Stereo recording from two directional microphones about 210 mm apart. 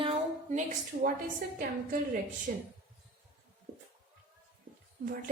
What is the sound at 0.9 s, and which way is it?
Speech, 40° right (ahead or behind).